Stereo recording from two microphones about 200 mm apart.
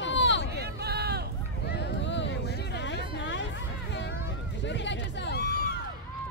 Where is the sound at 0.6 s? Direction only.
55° right (ahead or behind).